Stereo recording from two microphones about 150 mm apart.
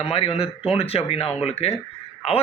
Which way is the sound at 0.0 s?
40° left (ahead or behind).